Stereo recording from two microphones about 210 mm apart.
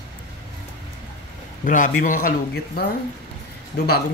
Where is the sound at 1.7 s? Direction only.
40° left (ahead or behind).